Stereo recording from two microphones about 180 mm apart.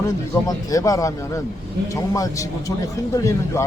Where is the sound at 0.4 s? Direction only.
20° left (ahead or behind).